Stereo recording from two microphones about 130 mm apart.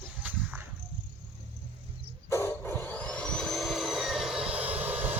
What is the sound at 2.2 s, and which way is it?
Vehicle, 20° left (ahead or behind).